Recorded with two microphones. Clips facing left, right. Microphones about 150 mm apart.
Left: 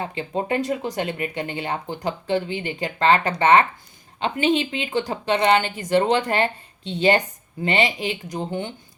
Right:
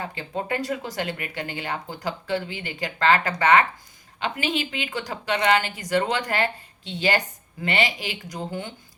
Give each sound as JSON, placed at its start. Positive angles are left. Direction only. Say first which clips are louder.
{"t": 0.0, "sound": "speech", "louder": "left 4 dB", "side_deg": 25}